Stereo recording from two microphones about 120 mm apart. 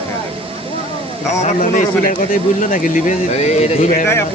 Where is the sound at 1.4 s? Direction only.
90° left; by 4.0 s 70° left (ahead or behind).